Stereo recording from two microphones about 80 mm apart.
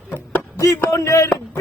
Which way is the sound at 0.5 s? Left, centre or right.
Left.